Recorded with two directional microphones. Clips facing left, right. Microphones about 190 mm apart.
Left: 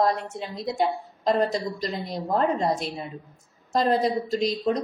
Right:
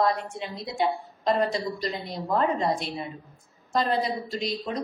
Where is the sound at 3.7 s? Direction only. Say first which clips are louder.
Left 4 dB; 40° left (ahead or behind).